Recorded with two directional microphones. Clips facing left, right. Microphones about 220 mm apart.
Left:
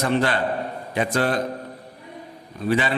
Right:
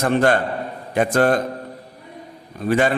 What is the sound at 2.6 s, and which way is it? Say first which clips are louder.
Speech: right 4 dB; 50° right (ahead or behind).